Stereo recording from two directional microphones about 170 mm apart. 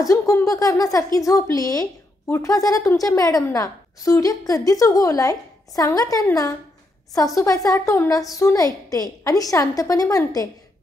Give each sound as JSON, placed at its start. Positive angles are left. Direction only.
{"t": 0.0, "sound": "a woman's voice", "side_deg": 20}